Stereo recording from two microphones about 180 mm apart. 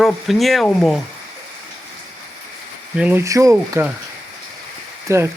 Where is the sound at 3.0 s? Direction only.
10° right (ahead or behind).